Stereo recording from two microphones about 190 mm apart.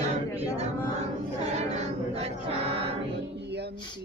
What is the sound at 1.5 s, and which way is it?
Music, 35° right (ahead or behind).